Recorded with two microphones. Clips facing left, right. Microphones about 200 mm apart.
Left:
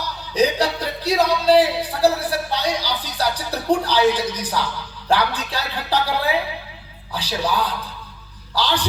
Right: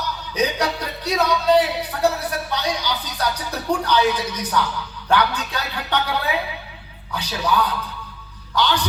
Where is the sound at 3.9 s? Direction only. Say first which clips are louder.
Left 2 dB; 30° left (ahead or behind).